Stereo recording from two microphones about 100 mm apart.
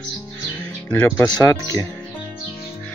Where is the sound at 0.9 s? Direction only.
15° left (ahead or behind).